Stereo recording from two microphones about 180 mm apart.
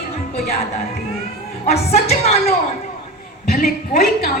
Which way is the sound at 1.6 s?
35° left (ahead or behind).